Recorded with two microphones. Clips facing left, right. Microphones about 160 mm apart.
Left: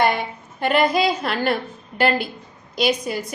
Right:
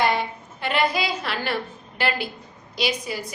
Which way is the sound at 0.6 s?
50° left (ahead or behind).